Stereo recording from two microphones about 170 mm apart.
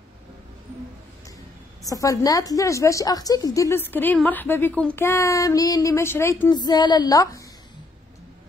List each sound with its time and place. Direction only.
1.9 s a woman's voice: 20° left (ahead or behind)